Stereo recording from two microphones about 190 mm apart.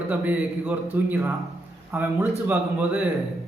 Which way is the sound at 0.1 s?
10° right (ahead or behind).